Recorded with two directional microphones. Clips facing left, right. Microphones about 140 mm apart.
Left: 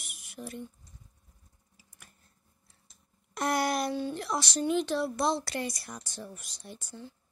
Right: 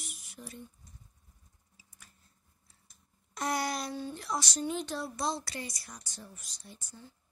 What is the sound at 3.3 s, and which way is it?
Speech, 60° left (ahead or behind).